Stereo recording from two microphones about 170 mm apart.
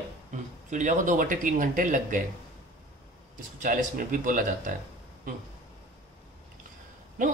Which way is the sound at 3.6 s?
50° right (ahead or behind).